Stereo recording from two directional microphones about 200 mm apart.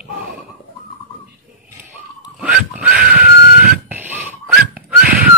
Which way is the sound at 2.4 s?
5° right (ahead or behind).